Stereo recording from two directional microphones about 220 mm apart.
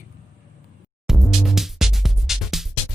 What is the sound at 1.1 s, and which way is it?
Music, centre (ahead or behind).